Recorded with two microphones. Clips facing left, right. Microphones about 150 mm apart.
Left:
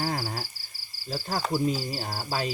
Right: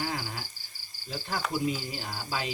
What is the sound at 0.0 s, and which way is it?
Cricket, 40° left (ahead or behind).